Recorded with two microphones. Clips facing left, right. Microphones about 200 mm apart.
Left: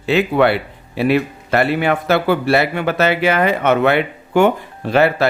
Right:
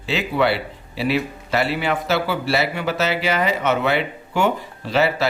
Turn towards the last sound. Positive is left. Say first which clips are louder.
# left 5 dB
turn(degrees=55)  # may be behind; listen again after turning